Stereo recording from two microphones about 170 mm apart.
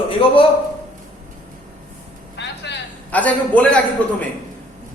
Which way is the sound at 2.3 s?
90° left.